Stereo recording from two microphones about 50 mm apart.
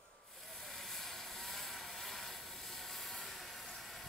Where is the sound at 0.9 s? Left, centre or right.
Centre.